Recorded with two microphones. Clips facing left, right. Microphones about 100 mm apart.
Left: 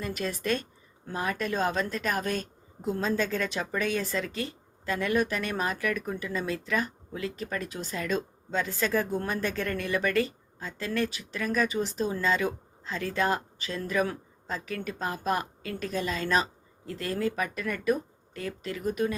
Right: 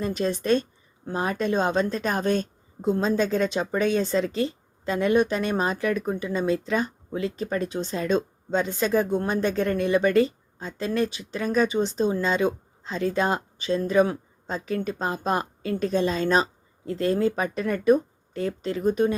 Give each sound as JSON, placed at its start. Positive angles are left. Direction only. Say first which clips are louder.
{"t": 0.0, "sound": "a woman's voice", "louder": "right 6 dB", "side_deg": -25}